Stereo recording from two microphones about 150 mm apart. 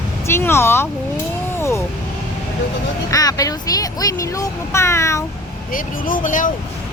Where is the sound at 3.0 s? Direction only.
25° left (ahead or behind).